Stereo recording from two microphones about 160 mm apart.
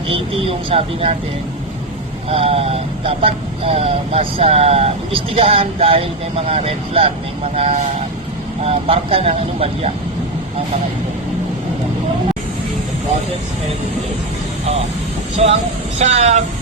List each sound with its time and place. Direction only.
0.1 s speech: 35° right (ahead or behind)
2.3 s speech: 35° right (ahead or behind)
15.4 s speech: 45° right (ahead or behind)